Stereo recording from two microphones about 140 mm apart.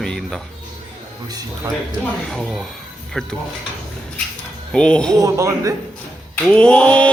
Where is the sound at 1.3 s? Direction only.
25° right (ahead or behind).